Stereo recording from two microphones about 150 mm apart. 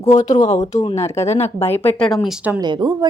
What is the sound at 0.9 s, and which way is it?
Speech, 20° left (ahead or behind).